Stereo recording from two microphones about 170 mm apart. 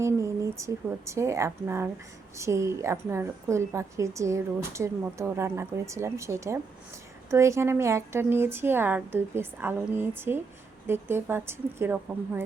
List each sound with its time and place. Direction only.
0.0 s a woman's voice: 15° right (ahead or behind)